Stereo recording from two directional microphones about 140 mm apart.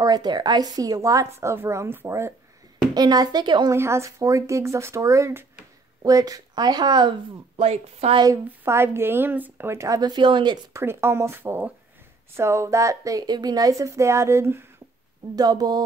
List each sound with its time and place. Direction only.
0.0 s a woman's voice: 30° right (ahead or behind)
3.7 s a woman's voice: 20° right (ahead or behind); by 8.2 s 45° right (ahead or behind)
8.5 s a woman's voice: 15° right (ahead or behind); by 10.6 s 35° right (ahead or behind)
10.7 s a woman's voice: 15° right (ahead or behind)